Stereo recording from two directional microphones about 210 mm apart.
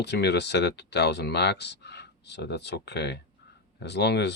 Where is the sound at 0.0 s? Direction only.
55° left (ahead or behind).